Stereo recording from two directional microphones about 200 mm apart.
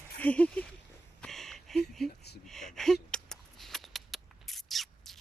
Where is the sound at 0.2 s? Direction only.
5° left (ahead or behind).